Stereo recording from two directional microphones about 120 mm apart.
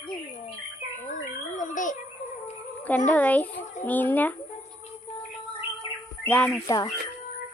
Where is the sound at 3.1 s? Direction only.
10° left (ahead or behind).